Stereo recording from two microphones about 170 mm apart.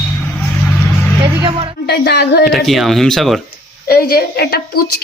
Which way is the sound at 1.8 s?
70° left (ahead or behind).